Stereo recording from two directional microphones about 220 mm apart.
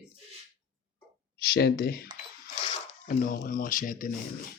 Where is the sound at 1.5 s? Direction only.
45° left (ahead or behind).